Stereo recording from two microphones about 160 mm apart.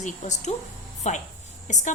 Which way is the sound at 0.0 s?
50° left (ahead or behind).